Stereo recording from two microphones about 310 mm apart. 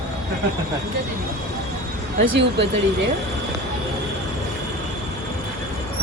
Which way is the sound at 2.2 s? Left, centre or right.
Right.